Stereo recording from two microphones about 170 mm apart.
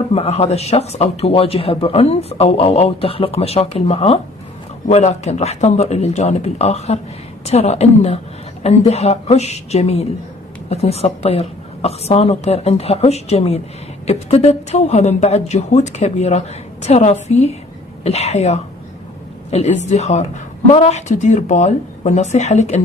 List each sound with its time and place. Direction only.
0.1 s speech: 35° left (ahead or behind)